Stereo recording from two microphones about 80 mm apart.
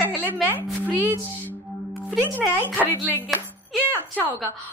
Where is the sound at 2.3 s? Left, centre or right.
Left.